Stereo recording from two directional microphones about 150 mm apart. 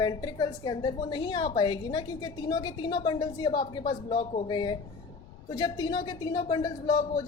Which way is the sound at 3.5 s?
55° left (ahead or behind).